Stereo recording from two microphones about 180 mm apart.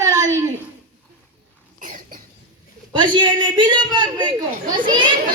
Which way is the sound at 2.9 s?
25° right (ahead or behind).